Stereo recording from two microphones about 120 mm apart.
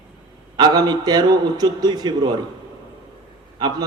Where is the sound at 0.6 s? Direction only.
35° right (ahead or behind).